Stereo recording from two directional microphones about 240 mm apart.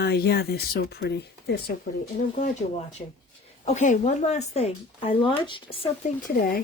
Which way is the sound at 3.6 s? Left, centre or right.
Left.